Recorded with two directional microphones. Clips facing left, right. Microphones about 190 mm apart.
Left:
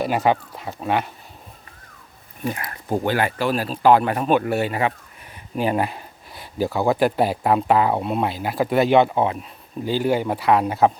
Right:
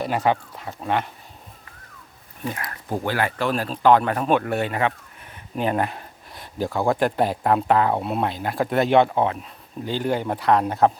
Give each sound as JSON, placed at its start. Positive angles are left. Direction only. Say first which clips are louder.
{"t": 0.0, "sound": "speech", "louder": "left 2 dB", "side_deg": 10}
{"t": 2.4, "sound": "speech", "louder": "left 3 dB", "side_deg": 25}
{"t": 3.3, "sound": "speech", "louder": "left 2 dB", "side_deg": 5}